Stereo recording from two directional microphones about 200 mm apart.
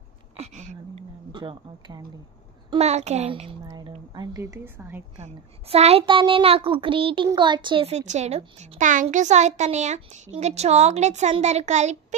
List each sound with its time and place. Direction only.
0.4 s a sound: 35° right (ahead or behind)
1.3 s a child's voice: 25° right (ahead or behind)
2.7 s a woman's voice: 35° right (ahead or behind); by 5.0 s 10° right (ahead or behind)
5.2 s a child's voice: 30° right (ahead or behind)